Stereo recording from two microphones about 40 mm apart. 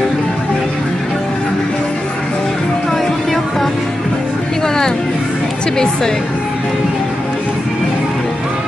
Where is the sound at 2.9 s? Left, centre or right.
Centre.